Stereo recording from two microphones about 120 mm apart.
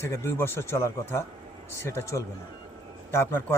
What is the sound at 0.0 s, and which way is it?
Speech, 20° left (ahead or behind).